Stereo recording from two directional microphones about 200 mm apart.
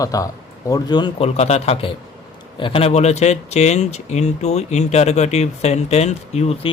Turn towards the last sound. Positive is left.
turn(degrees=30)  # may be behind; listen again after turning